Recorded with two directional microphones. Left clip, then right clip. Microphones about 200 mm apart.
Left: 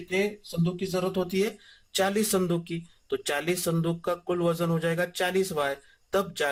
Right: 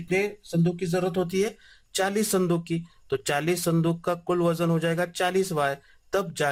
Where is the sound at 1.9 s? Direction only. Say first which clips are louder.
Right 1 dB; 20° right (ahead or behind).